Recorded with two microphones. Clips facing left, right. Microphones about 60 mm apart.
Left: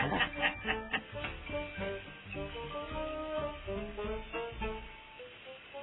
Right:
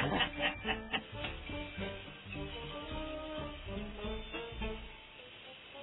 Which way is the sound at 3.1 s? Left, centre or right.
Left.